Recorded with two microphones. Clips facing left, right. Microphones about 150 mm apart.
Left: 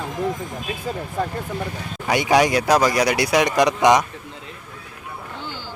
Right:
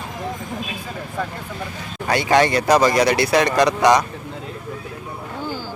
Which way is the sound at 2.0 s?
15° left (ahead or behind).